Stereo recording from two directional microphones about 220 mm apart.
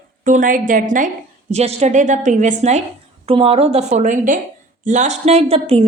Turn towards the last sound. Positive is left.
turn(degrees=-25)  # may be behind; listen again after turning